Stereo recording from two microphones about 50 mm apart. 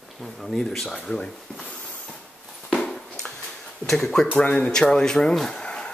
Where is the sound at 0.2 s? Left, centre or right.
Centre; by 2.1 s left.